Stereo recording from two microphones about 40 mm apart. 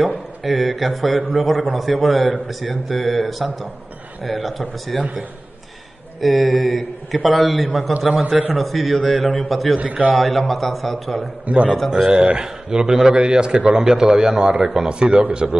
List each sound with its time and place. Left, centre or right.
0.4 s a man's voice: centre
6.2 s a man's voice: centre
9.8 s a man's voice: right
10.1 s a man's voice: centre
11.4 s a man's voice: right